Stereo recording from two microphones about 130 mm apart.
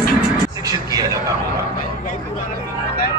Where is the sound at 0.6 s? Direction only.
30° right (ahead or behind).